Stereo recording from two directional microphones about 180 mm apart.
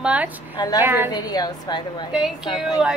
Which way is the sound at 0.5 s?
20° left (ahead or behind).